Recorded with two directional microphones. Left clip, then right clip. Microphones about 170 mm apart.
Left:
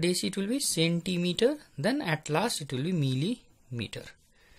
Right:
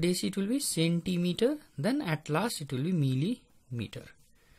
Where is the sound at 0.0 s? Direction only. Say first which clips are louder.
Left 2 dB; 30° right (ahead or behind).